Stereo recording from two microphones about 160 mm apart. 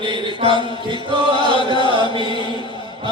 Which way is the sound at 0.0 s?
30° right (ahead or behind).